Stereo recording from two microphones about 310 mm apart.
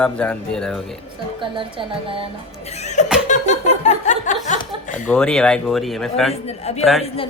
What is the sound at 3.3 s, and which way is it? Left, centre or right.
Chuckle, left.